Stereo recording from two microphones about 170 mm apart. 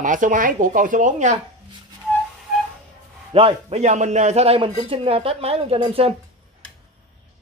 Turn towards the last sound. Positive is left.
turn(degrees=-30)  # may be behind; listen again after turning